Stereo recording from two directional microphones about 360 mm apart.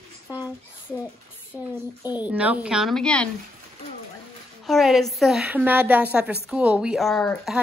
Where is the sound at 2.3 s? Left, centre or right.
Centre.